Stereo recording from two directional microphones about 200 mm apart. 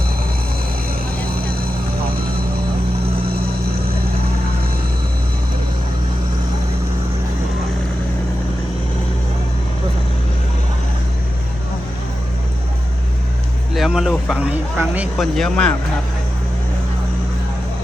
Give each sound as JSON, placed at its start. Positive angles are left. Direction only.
{"t": 13.7, "sound": "speech", "side_deg": 0}